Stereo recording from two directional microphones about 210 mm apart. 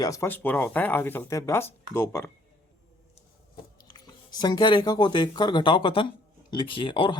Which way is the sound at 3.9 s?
20° left (ahead or behind).